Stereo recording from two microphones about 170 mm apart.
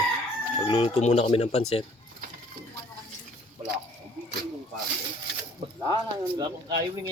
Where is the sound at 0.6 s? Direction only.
35° left (ahead or behind).